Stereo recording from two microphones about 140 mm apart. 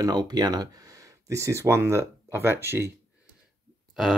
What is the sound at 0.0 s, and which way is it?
Speech, 30° right (ahead or behind).